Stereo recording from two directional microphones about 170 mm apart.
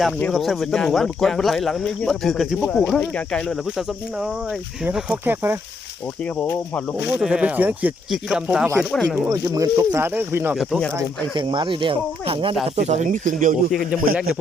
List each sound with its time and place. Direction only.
0.2 s speech: centre (ahead or behind)
7.1 s speech: 5° right (ahead or behind)
9.3 s speech: 20° right (ahead or behind)
10.6 s speech: centre (ahead or behind)
11.3 s speech: 30° right (ahead or behind); by 13.6 s 50° right (ahead or behind)
13.9 s speech: 5° right (ahead or behind)